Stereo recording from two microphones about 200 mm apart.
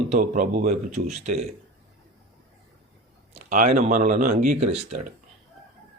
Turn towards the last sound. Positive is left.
turn(degrees=-30)  # may be behind; listen again after turning